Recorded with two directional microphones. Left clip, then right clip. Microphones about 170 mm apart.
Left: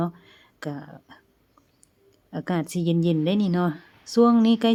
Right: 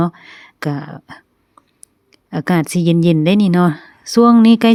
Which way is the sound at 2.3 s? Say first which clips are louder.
Right 10 dB; 40° right (ahead or behind).